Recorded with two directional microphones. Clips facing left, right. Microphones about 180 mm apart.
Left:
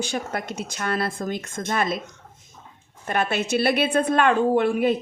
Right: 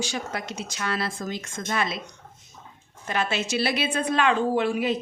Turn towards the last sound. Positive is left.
turn(degrees=55)  # may be behind; listen again after turning